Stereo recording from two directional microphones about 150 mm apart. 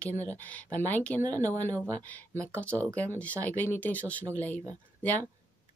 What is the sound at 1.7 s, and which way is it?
Speech, 20° right (ahead or behind).